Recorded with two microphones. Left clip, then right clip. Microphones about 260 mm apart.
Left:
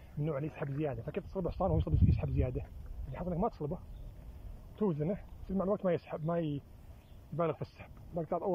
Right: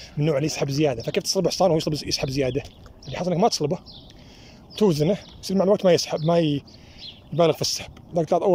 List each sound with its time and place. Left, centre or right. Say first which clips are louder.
0.2 s speech: right 15 dB; right